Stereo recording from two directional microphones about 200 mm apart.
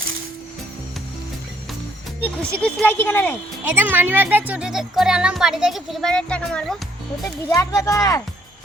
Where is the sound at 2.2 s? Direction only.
10° left (ahead or behind).